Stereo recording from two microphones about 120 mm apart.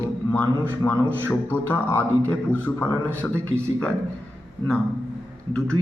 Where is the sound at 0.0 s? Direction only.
15° left (ahead or behind).